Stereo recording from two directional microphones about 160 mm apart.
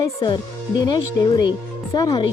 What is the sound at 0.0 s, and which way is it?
Speech, 30° left (ahead or behind).